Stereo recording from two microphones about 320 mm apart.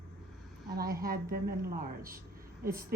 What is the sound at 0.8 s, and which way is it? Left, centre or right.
A woman's voice, right.